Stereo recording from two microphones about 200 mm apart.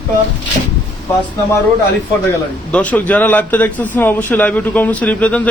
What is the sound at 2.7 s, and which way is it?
Speech, 10° left (ahead or behind).